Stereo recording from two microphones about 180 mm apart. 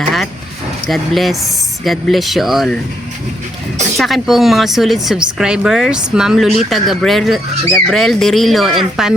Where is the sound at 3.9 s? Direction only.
Centre (ahead or behind).